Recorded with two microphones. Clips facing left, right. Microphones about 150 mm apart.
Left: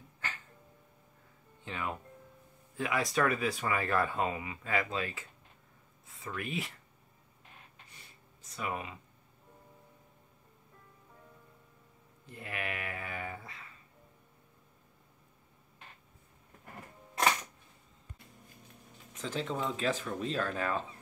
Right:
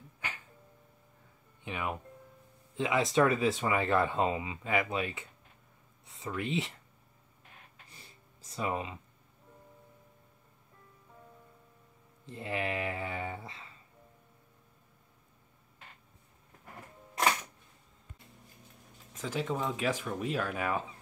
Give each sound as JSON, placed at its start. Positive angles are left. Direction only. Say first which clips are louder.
{"t": 0.2, "sound": "music", "louder": "even", "side_deg": -15}
{"t": 1.6, "sound": "speech", "louder": "right 2 dB", "side_deg": -15}
{"t": 6.1, "sound": "speech", "louder": "right 4 dB", "side_deg": -25}
{"t": 7.9, "sound": "a sound", "louder": "right 2 dB", "side_deg": -30}
{"t": 12.3, "sound": "speech", "louder": "right 5 dB", "side_deg": -25}
{"t": 19.1, "sound": "speech", "louder": "right 2 dB", "side_deg": -10}